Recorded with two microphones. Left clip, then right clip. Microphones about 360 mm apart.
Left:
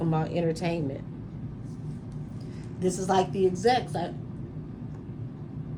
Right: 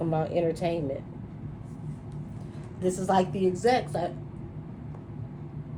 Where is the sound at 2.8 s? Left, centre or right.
Centre.